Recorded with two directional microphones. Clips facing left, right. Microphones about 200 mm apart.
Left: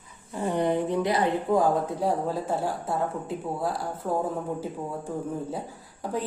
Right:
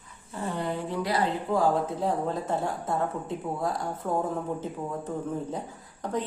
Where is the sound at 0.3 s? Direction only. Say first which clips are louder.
Left 6 dB; 15° left (ahead or behind).